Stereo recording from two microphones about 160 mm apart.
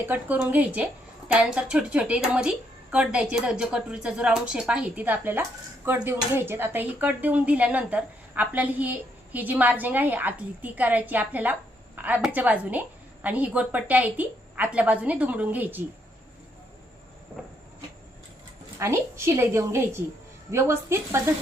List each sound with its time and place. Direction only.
0.0 s speech: 10° right (ahead or behind)
18.8 s speech: 15° right (ahead or behind)